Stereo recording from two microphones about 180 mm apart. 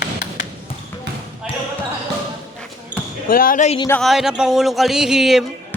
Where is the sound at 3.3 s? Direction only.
50° left (ahead or behind).